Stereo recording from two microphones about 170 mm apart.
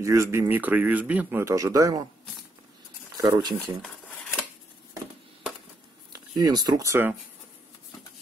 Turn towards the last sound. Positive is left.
turn(degrees=-15)  # may be behind; listen again after turning